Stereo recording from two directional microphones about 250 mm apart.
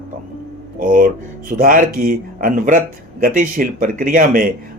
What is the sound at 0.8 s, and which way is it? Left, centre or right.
Speech, right.